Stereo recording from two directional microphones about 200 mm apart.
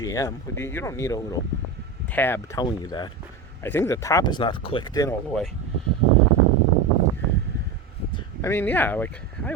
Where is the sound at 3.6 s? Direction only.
10° left (ahead or behind).